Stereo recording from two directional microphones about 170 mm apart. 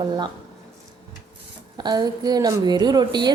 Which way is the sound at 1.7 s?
25° right (ahead or behind).